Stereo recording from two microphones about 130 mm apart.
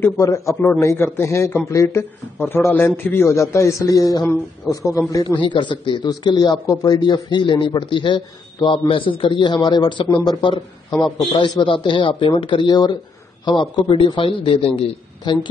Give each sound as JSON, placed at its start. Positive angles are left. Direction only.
{"t": 0.0, "sound": "a man's voice", "side_deg": 25}
{"t": 5.4, "sound": "a man's voice", "side_deg": 35}